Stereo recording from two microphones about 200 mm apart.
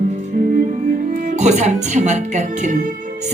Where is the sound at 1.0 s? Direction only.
40° right (ahead or behind).